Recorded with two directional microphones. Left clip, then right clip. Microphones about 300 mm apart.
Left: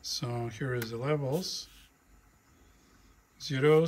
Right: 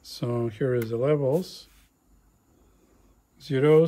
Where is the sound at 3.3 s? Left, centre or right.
Centre.